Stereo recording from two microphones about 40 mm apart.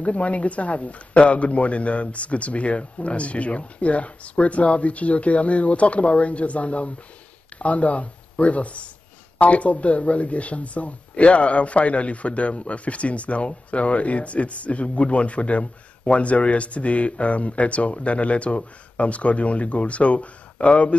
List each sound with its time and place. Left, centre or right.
0.0 s speech: left